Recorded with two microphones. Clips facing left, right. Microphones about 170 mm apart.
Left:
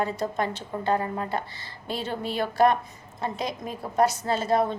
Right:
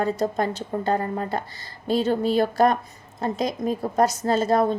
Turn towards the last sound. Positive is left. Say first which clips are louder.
# right 4 dB
turn(degrees=-40)  # may be behind; listen again after turning